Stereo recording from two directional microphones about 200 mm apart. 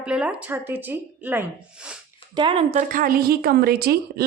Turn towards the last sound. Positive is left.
turn(degrees=-50)  # may be behind; listen again after turning